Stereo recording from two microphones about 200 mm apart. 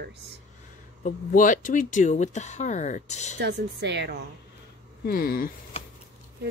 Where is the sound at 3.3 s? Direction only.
60° right (ahead or behind).